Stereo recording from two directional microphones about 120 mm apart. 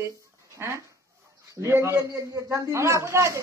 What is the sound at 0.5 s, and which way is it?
Chicken, 25° right (ahead or behind).